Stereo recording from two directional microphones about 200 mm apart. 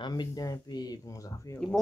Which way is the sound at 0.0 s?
20° left (ahead or behind).